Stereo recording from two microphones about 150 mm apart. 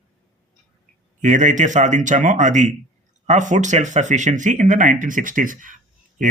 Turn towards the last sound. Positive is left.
turn(degrees=-60)  # may be behind; listen again after turning